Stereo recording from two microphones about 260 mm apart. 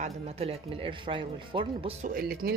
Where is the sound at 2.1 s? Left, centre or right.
Right.